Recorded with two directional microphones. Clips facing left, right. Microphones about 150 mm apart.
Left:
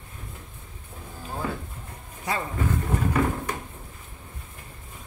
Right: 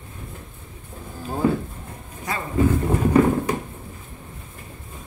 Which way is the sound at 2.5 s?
15° right (ahead or behind).